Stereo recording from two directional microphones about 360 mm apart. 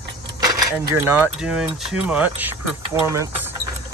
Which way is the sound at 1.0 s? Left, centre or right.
Centre.